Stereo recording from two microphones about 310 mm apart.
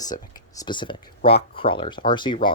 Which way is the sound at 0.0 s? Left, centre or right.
Centre.